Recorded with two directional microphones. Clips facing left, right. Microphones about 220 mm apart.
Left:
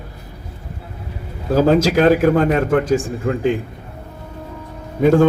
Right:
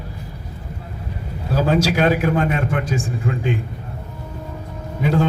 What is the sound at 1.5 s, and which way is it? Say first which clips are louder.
A man's voice: left 5 dB; 45° left (ahead or behind).